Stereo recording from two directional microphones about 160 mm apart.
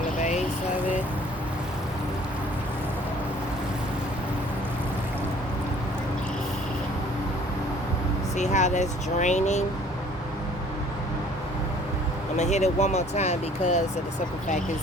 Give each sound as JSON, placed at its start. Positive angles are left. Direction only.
{"t": 0.2, "sound": "vehicle", "side_deg": 50}
{"t": 8.4, "sound": "speech", "side_deg": 45}
{"t": 12.4, "sound": "speech", "side_deg": 45}